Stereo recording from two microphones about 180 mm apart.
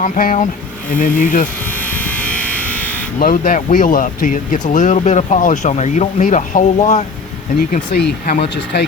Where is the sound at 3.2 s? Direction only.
50° left (ahead or behind).